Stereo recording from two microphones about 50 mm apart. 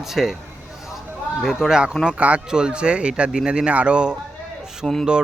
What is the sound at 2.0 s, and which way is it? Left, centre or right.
Speech, right.